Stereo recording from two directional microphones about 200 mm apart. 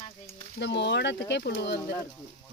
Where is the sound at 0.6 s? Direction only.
60° left (ahead or behind).